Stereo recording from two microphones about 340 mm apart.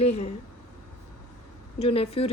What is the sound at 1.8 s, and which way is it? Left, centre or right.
Speech, centre.